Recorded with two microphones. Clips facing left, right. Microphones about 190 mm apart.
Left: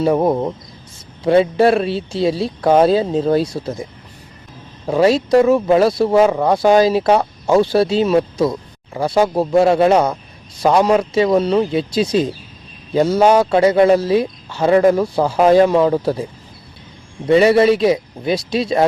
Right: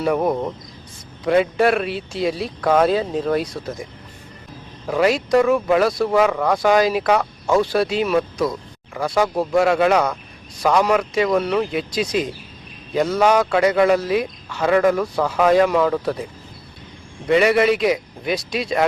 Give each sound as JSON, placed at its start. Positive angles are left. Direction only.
{"t": 0.0, "sound": "speech", "side_deg": 25}
{"t": 4.9, "sound": "speech", "side_deg": 30}
{"t": 17.2, "sound": "speech", "side_deg": 30}